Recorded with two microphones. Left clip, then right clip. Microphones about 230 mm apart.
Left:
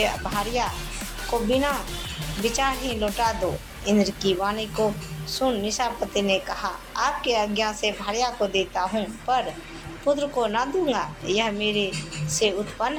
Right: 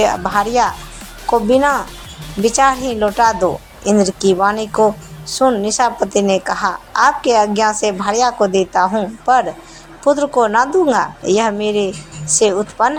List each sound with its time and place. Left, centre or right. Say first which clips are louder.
0.0 s a woman's voice: right 11 dB; right